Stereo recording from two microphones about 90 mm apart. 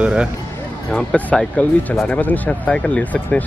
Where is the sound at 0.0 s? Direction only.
10° right (ahead or behind).